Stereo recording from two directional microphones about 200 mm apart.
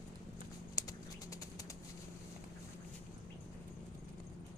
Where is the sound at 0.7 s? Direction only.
15° left (ahead or behind).